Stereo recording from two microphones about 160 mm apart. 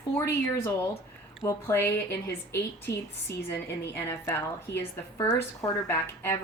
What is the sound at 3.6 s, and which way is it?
A woman's voice, 15° left (ahead or behind).